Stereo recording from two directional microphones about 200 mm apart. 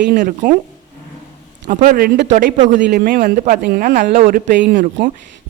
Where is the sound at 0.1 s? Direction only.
40° right (ahead or behind).